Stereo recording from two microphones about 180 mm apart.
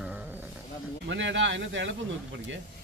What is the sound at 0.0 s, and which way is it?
Music, 5° right (ahead or behind).